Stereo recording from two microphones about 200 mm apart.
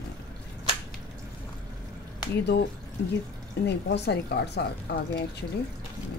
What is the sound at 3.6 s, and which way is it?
Speech, 55° left (ahead or behind).